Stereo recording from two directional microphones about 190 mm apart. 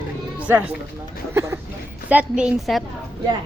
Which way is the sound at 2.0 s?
5° right (ahead or behind).